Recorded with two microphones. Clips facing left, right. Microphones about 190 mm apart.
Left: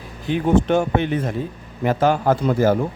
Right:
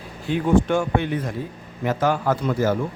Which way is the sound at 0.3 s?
20° left (ahead or behind).